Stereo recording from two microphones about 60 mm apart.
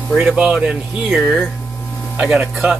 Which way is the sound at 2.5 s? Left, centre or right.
Centre.